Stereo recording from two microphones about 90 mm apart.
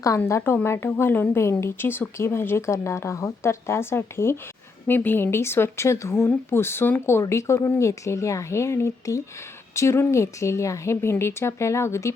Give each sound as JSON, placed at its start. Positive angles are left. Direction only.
{"t": 0.3, "sound": "speech", "side_deg": 30}